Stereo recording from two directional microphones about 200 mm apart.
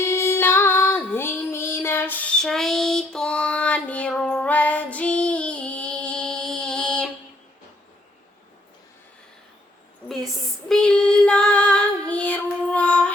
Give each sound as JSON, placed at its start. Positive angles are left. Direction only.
{"t": 0.0, "sound": "female singing", "side_deg": 15}
{"t": 10.2, "sound": "female singing", "side_deg": 5}